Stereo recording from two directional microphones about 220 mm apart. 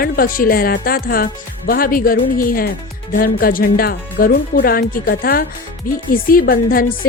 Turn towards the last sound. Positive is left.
turn(degrees=40)  # may be behind; listen again after turning